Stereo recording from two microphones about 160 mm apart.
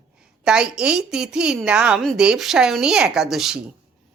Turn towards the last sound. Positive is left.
turn(degrees=0)  # may be behind; listen again after turning